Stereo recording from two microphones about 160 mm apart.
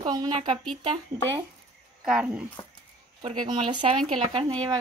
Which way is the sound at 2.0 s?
5° right (ahead or behind).